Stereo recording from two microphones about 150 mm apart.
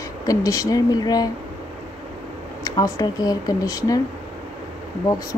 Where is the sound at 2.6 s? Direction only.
20° left (ahead or behind).